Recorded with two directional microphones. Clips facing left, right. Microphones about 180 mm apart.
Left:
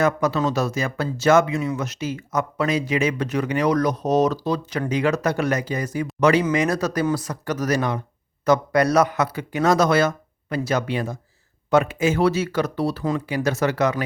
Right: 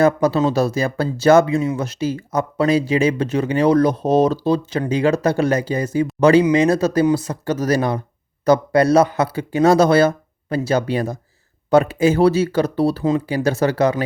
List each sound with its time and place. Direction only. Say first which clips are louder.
0.0 s speech: right 5 dB; 30° right (ahead or behind)